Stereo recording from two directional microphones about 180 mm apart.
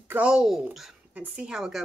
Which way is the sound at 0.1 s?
5° right (ahead or behind).